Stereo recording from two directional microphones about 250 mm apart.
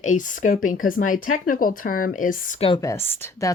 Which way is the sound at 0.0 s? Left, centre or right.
Left.